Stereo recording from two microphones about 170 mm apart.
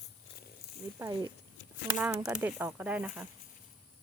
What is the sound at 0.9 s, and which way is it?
Speech, 15° right (ahead or behind).